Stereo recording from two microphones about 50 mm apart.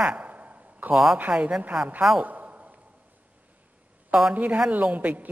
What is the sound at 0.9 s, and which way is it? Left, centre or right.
Speech, centre.